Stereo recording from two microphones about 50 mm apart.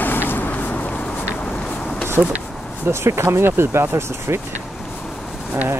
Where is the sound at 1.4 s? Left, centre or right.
Left.